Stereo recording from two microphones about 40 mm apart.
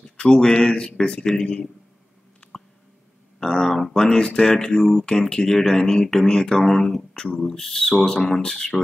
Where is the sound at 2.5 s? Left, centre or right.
Centre.